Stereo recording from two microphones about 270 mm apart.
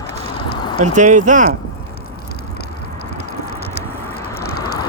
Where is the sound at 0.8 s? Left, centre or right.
Right.